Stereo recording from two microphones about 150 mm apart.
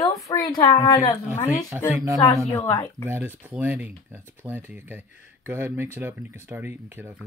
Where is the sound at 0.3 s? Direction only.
25° left (ahead or behind).